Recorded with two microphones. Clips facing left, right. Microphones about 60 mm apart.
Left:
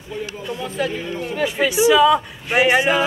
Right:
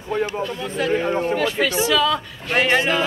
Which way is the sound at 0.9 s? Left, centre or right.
Right.